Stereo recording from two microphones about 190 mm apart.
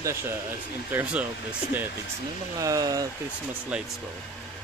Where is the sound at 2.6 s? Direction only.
20° right (ahead or behind).